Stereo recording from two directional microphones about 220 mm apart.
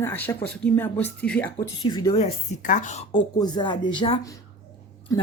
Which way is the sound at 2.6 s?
35° left (ahead or behind).